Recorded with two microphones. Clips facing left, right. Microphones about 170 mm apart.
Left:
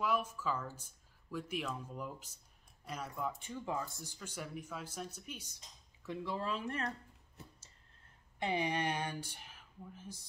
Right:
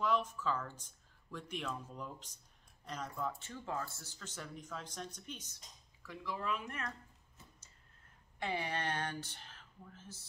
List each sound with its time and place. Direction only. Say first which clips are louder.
0.0 s speech: right 1 dB; 10° left (ahead or behind)
6.0 s speech: left 2 dB; 30° left (ahead or behind)
8.4 s speech: left 3 dB; 20° left (ahead or behind)